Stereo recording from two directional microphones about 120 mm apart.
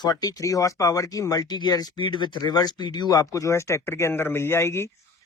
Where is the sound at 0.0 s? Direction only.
35° left (ahead or behind).